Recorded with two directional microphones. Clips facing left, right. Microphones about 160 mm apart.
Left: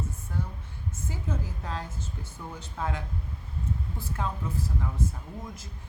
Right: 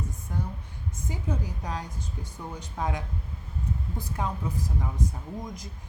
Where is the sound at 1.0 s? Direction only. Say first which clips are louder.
Right 2 dB; 15° right (ahead or behind).